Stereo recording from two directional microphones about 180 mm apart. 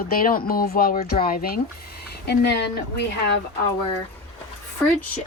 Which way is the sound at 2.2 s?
65° left (ahead or behind).